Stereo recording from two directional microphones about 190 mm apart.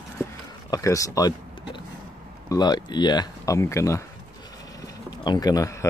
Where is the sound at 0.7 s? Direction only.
15° left (ahead or behind).